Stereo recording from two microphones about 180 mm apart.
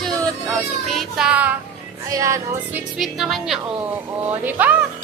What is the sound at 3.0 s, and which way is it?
A woman's voice, centre (ahead or behind).